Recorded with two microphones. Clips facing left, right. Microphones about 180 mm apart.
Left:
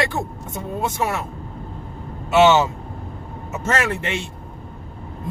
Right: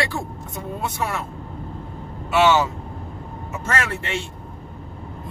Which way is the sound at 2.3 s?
25° left (ahead or behind).